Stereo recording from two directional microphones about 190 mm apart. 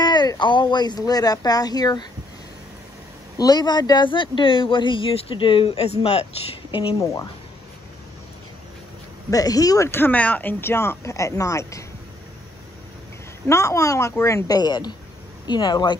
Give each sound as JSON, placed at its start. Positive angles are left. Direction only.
{"t": 0.0, "sound": "speech", "side_deg": 20}
{"t": 3.3, "sound": "speech", "side_deg": 20}
{"t": 9.3, "sound": "speech", "side_deg": 20}
{"t": 13.5, "sound": "speech", "side_deg": 15}